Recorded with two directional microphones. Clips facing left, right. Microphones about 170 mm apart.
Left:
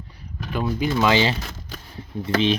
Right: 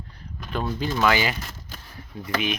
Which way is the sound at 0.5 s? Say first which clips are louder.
Left 4 dB; 10° left (ahead or behind).